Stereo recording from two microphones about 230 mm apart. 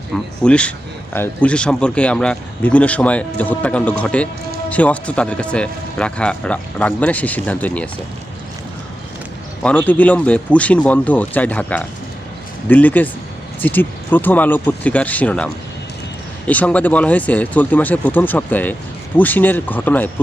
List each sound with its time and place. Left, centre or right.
0.1 s speech: centre
9.6 s speech: centre
16.5 s speech: centre